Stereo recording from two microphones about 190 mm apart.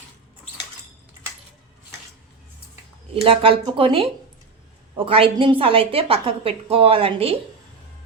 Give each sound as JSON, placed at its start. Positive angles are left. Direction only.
{"t": 3.2, "sound": "a woman's voice", "side_deg": -30}